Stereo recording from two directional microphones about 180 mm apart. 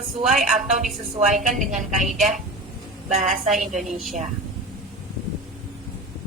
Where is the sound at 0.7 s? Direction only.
45° right (ahead or behind).